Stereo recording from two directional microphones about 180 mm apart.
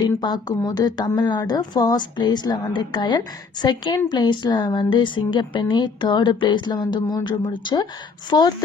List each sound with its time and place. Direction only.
0.0 s a woman's voice: 25° left (ahead or behind)